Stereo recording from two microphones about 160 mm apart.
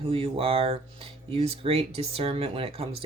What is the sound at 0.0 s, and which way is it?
Speech, 35° right (ahead or behind).